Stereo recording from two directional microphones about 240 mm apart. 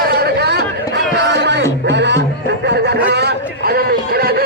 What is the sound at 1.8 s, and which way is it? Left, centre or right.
Speech, right.